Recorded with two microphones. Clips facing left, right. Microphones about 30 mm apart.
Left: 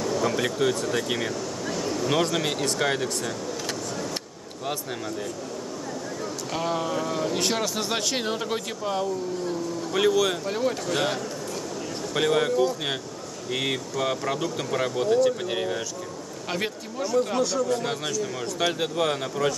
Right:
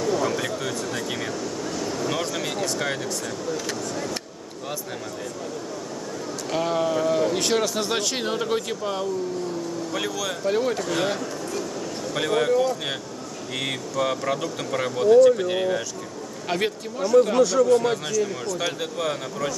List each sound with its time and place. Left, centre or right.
0.0 s a sound: centre
0.4 s speech: centre
6.5 s speech: centre
9.9 s speech: centre
10.4 s speech: centre
12.1 s speech: centre
18.6 s speech: centre